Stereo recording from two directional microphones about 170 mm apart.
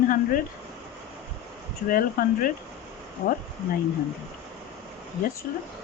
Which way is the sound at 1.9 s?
55° left (ahead or behind).